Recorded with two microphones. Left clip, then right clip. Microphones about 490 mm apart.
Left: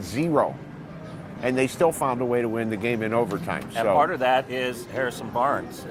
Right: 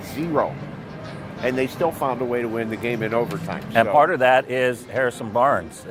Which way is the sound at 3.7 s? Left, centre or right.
Right.